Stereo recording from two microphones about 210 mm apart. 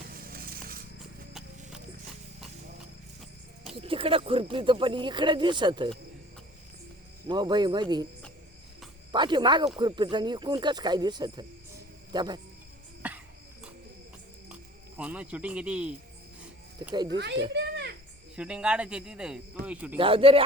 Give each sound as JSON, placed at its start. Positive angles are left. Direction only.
{"t": 0.1, "sound": "scissors", "side_deg": -45}
{"t": 3.8, "sound": "speech", "side_deg": -25}
{"t": 7.3, "sound": "speech", "side_deg": -20}
{"t": 9.1, "sound": "speech", "side_deg": -20}
{"t": 13.0, "sound": "cricket", "side_deg": -10}
{"t": 14.5, "sound": "speech", "side_deg": -5}
{"t": 16.9, "sound": "speech", "side_deg": -20}
{"t": 17.5, "sound": "a sound", "side_deg": -55}
{"t": 18.3, "sound": "speech", "side_deg": -5}
{"t": 20.0, "sound": "speech", "side_deg": -25}